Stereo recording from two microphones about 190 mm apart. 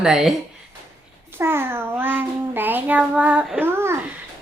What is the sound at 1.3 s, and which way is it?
Child singing, 10° right (ahead or behind).